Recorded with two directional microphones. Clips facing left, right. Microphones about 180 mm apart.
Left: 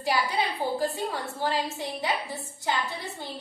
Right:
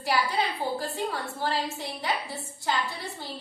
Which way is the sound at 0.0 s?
20° left (ahead or behind).